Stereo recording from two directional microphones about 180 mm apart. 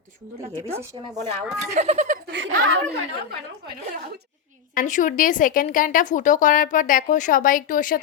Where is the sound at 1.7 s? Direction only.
40° right (ahead or behind).